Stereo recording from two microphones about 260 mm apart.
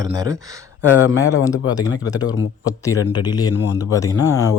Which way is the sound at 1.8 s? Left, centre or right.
Centre.